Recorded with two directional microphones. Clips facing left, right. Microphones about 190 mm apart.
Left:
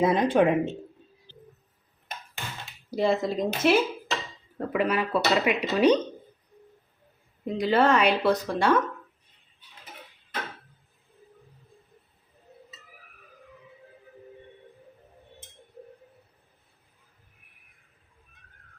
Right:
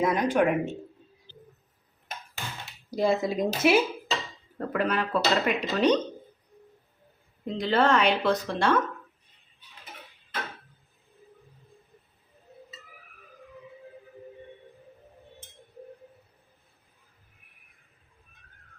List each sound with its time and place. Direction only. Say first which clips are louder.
0.0 s speech: left 2 dB; 30° left (ahead or behind)
2.9 s speech: even; centre (ahead or behind)
4.5 s speech: left 2 dB; 5° left (ahead or behind)
7.4 s speech: left 2 dB; 10° left (ahead or behind)